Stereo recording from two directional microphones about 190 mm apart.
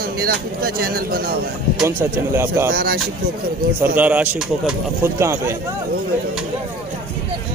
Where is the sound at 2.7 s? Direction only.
55° right (ahead or behind).